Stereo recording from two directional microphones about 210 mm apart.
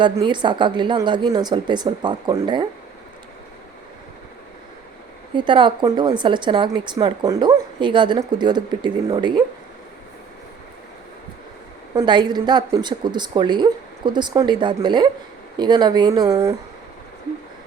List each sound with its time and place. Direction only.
0.0 s a woman's voice: 20° right (ahead or behind)
5.3 s a woman's voice: 25° right (ahead or behind)
11.9 s a woman's voice: 20° right (ahead or behind)